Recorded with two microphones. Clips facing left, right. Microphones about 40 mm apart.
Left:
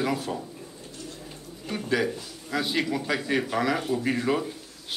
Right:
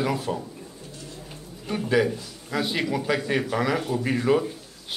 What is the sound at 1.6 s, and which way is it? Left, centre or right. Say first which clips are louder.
Speech: right 4 dB; centre.